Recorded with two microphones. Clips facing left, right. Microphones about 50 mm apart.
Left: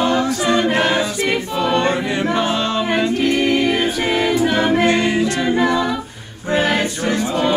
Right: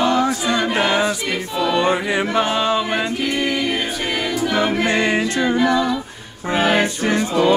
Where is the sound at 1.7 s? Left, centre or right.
Centre.